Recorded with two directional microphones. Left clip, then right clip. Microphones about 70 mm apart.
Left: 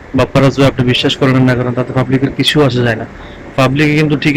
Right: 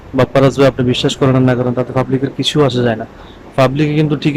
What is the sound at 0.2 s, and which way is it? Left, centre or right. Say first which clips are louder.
A man's voice: even; right.